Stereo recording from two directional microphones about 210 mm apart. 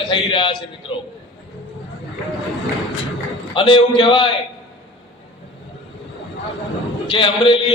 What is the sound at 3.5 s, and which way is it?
Speech, 25° left (ahead or behind).